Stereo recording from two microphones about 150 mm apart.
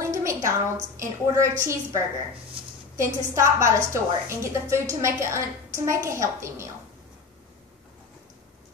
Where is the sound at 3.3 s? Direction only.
20° right (ahead or behind).